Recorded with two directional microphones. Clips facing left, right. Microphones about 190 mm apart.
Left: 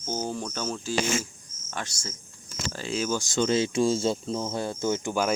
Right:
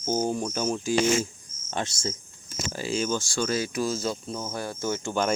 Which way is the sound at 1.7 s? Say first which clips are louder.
Right 6 dB; 25° right (ahead or behind).